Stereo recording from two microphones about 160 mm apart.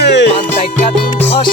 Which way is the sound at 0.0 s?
90° left.